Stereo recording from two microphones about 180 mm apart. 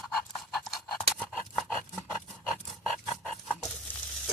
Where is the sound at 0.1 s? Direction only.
Centre (ahead or behind).